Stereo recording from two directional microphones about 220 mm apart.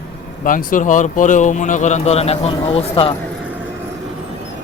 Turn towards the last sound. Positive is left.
turn(degrees=25)  # may be behind; listen again after turning